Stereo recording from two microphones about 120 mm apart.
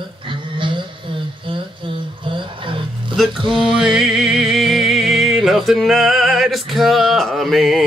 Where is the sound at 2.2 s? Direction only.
45° right (ahead or behind).